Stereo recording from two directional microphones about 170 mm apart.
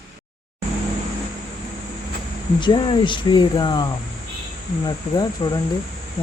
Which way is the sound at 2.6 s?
30° left (ahead or behind).